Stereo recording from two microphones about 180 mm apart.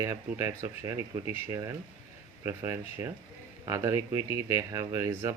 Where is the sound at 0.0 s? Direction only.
15° right (ahead or behind).